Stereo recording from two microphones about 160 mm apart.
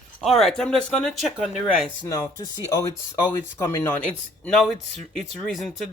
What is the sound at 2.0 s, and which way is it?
Speech, 20° left (ahead or behind).